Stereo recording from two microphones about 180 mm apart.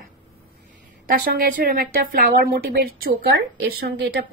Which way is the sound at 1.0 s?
50° right (ahead or behind).